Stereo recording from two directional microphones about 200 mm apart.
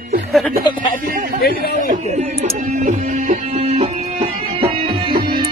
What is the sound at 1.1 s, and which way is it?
Speech, 45° right (ahead or behind).